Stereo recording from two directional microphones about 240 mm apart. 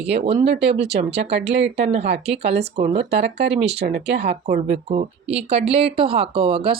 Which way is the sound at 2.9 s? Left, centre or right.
Right.